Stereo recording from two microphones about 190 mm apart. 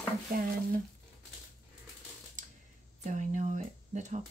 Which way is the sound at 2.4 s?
40° right (ahead or behind).